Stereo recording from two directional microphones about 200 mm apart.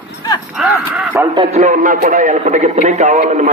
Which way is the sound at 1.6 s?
40° right (ahead or behind).